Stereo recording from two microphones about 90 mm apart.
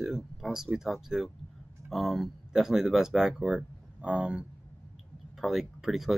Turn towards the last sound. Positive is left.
turn(degrees=0)  # may be behind; listen again after turning